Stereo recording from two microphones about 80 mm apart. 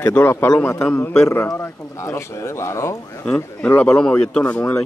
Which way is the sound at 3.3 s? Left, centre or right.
Left.